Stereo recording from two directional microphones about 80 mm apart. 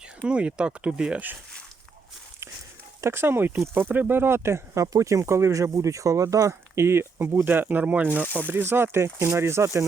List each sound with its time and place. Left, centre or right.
0.2 s speech: centre
3.0 s speech: right